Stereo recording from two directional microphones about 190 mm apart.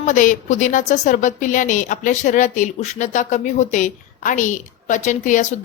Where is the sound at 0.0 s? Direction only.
40° left (ahead or behind).